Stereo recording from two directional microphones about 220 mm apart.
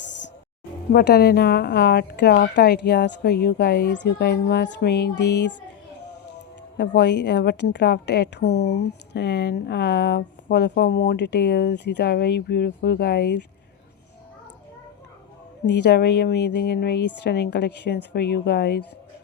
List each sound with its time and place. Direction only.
0.9 s a woman's voice: 45° left (ahead or behind)
6.7 s a woman's voice: 50° left (ahead or behind)
15.6 s a woman's voice: 50° left (ahead or behind)